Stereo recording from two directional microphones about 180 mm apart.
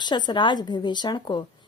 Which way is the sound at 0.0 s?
25° left (ahead or behind).